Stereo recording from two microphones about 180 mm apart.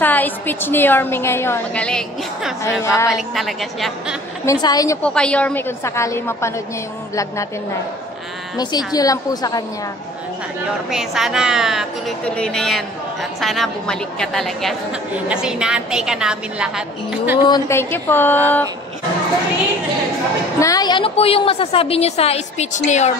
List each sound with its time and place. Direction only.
0.0 s a woman's voice: 10° left (ahead or behind)
2.8 s a woman's voice: 15° left (ahead or behind)
3.1 s a woman's voice: centre (ahead or behind)
4.5 s a woman's voice: 20° left (ahead or behind)
5.0 s a woman's voice: 5° left (ahead or behind)
8.5 s a woman's voice: 20° left (ahead or behind)
10.9 s a woman's voice: centre (ahead or behind)
17.5 s a woman's voice: 15° left (ahead or behind)
20.5 s a woman's voice: 20° left (ahead or behind); by 23.1 s 40° left (ahead or behind)